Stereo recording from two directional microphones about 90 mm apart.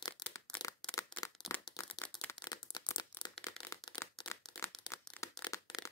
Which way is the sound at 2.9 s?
50° left (ahead or behind).